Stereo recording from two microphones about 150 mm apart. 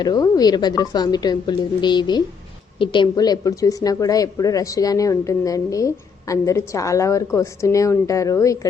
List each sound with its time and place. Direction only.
0.0 s speech: 25° left (ahead or behind)